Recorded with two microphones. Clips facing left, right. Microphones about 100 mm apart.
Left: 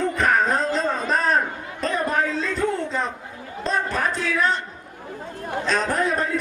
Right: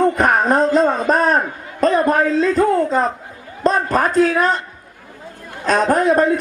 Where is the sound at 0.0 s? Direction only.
45° right (ahead or behind).